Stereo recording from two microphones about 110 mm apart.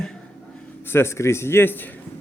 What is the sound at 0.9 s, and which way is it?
Speech, 25° left (ahead or behind).